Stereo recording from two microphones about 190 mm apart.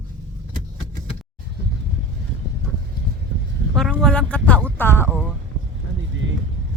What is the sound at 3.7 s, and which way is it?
Speech, 5° left (ahead or behind).